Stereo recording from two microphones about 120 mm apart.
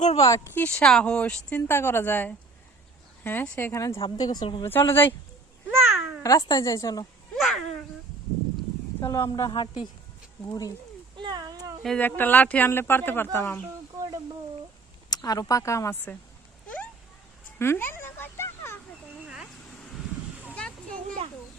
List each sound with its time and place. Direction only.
0.2 s a woman's voice: 25° left (ahead or behind)
4.2 s a woman's voice: 35° left (ahead or behind)
4.6 s a woman's voice: 20° left (ahead or behind)
5.6 s babbling: 20° right (ahead or behind)
6.2 s speech: 30° left (ahead or behind)
7.3 s babbling: centre (ahead or behind)
9.0 s speech: 25° left (ahead or behind)
11.2 s a sound: 35° right (ahead or behind)
11.8 s speech: 5° left (ahead or behind)
12.0 s a woman's voice: 15° left (ahead or behind)
15.1 s speech: 30° left (ahead or behind)
17.6 s a sound: 20° left (ahead or behind)
20.4 s a sound: 10° left (ahead or behind)